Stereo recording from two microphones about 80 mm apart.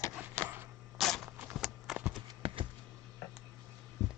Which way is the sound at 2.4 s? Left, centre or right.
Right.